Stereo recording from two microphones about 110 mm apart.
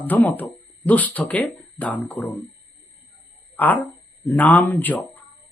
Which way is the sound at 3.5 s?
15° left (ahead or behind).